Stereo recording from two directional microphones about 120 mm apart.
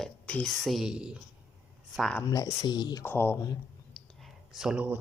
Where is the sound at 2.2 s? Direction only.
30° left (ahead or behind).